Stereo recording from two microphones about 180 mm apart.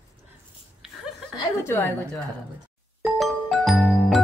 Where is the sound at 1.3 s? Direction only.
15° left (ahead or behind).